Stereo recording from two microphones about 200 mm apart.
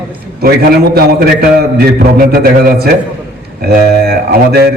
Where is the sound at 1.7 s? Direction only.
50° right (ahead or behind).